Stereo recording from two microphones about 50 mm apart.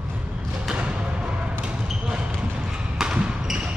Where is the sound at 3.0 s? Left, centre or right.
Centre.